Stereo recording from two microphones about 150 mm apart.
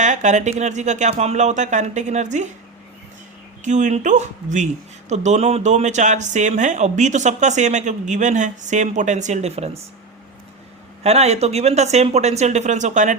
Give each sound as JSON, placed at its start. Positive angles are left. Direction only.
{"t": 0.0, "sound": "speech", "side_deg": -55}
{"t": 3.6, "sound": "speech", "side_deg": -55}
{"t": 11.0, "sound": "speech", "side_deg": -45}